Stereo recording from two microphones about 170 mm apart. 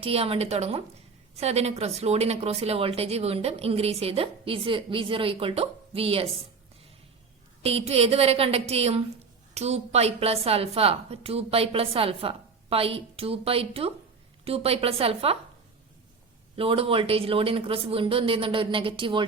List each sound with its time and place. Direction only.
0.0 s a woman's voice: 35° right (ahead or behind)
7.6 s a woman's voice: 35° right (ahead or behind)
16.6 s a woman's voice: 35° right (ahead or behind)